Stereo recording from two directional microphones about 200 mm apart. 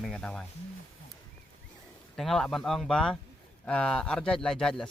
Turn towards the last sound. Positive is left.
turn(degrees=5)  # may be behind; listen again after turning